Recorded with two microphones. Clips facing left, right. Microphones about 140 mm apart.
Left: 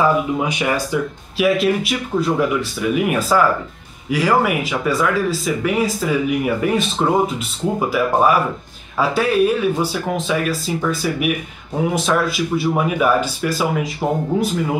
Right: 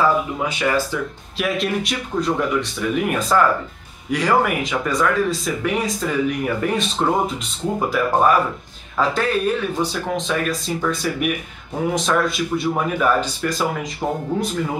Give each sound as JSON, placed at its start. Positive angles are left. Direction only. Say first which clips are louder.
{"t": 0.0, "sound": "speech", "louder": "left 2 dB", "side_deg": 15}
{"t": 1.4, "sound": "speech", "louder": "left 6 dB", "side_deg": 5}